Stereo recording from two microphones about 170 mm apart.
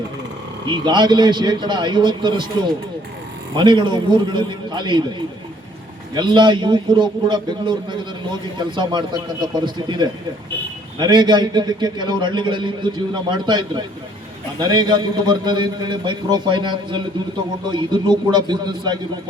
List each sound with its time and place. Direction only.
0.7 s a man's voice: 25° right (ahead or behind)
3.5 s a man's voice: 25° right (ahead or behind)
6.1 s a man's voice: 30° right (ahead or behind)